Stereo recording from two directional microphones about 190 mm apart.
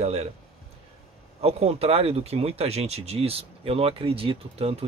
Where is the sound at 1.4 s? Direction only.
35° right (ahead or behind).